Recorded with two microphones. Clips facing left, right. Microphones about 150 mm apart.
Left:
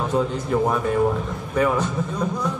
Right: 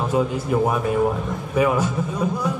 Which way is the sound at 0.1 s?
10° right (ahead or behind).